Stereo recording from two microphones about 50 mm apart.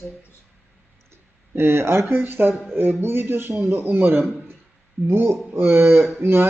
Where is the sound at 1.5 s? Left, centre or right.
Right.